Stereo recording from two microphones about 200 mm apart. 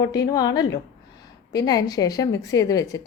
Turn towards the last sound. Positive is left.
turn(degrees=15)  # may be behind; listen again after turning